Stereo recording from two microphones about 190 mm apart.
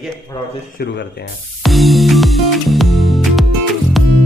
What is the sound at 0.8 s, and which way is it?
Speech, 55° left (ahead or behind).